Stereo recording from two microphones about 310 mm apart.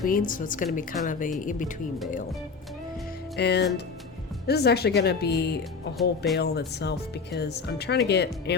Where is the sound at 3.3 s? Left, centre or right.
Left.